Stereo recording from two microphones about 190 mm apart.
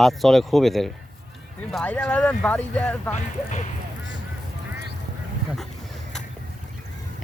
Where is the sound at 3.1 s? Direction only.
40° left (ahead or behind).